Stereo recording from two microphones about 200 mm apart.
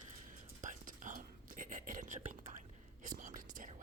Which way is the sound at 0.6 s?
40° right (ahead or behind).